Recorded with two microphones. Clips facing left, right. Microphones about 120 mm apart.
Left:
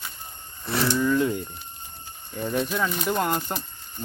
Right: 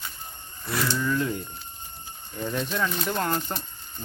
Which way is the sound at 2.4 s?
10° left (ahead or behind).